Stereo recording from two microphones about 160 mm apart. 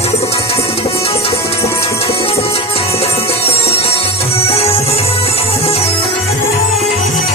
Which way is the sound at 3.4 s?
40° left (ahead or behind).